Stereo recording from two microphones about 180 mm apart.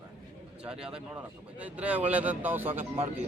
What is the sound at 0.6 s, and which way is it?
A man's voice, 5° right (ahead or behind).